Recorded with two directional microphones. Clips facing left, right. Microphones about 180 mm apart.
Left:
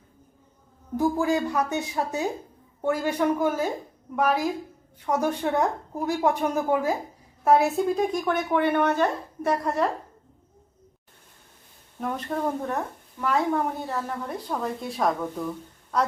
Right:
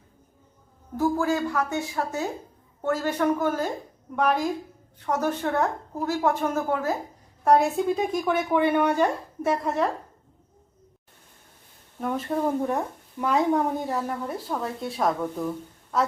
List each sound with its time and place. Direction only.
0.9 s a woman's voice: 15° left (ahead or behind); by 9.9 s centre (ahead or behind)
11.9 s speech: 5° right (ahead or behind)